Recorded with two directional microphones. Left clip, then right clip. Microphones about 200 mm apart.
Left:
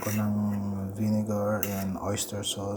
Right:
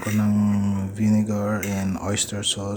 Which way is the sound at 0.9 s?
20° right (ahead or behind).